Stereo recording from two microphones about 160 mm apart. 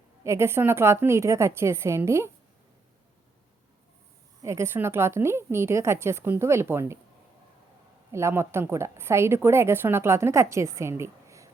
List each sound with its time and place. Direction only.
0.3 s a woman's voice: 15° right (ahead or behind)
4.4 s a woman's voice: 15° right (ahead or behind)
8.1 s a woman's voice: 15° right (ahead or behind)